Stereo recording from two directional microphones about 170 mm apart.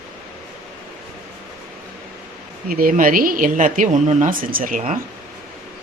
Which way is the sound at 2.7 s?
55° right (ahead or behind).